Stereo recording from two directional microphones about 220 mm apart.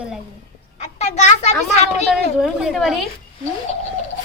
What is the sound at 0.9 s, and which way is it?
A child's voice, 30° left (ahead or behind).